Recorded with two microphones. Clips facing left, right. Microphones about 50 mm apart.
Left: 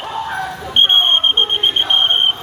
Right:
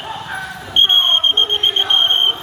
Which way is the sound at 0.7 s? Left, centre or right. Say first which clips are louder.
Left 1 dB; centre.